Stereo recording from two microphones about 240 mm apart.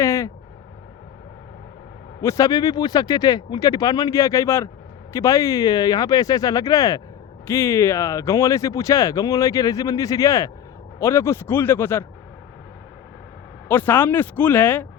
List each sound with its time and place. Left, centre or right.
0.0 s vehicle: centre
2.2 s speech: centre
13.7 s speech: centre